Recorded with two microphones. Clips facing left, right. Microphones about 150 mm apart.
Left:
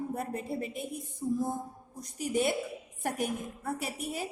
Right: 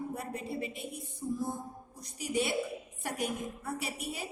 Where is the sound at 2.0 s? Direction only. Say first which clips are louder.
Left 3 dB; 45° left (ahead or behind).